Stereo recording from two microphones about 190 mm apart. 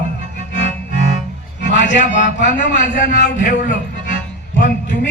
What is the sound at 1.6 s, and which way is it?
A man's voice, 40° left (ahead or behind).